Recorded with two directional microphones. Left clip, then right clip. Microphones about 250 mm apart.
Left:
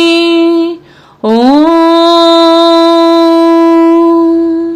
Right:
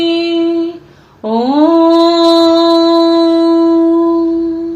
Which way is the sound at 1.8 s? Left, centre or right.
Left.